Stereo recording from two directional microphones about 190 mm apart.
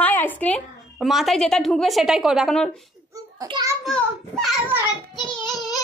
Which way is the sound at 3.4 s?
20° right (ahead or behind).